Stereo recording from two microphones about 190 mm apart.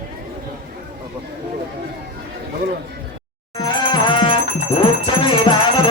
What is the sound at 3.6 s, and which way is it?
Music, 25° left (ahead or behind).